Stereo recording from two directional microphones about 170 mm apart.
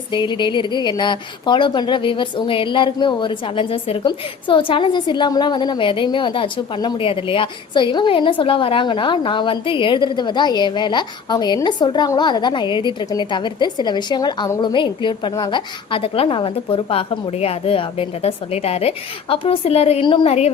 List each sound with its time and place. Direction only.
0.1 s a woman's voice: 30° left (ahead or behind)